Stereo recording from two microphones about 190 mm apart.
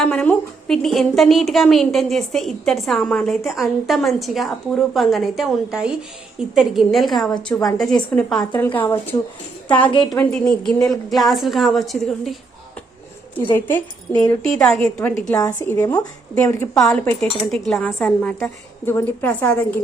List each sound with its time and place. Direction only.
0.0 s a woman's voice: 5° left (ahead or behind)
14.1 s speech: 20° left (ahead or behind)
14.6 s a woman's voice: centre (ahead or behind)
14.8 s speech: 15° left (ahead or behind)